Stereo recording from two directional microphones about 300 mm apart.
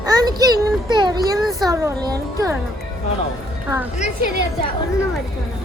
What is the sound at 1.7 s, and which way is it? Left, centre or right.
Speech, centre.